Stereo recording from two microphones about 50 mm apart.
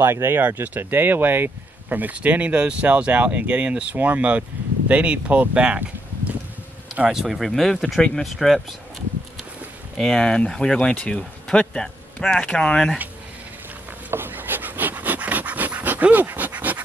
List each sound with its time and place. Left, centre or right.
0.0 s speech: right
0.4 s speech: right
7.1 s speech: centre
9.9 s speech: centre
14.1 s a sound: right